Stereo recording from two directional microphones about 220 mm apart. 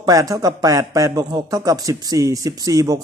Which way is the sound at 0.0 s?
15° right (ahead or behind).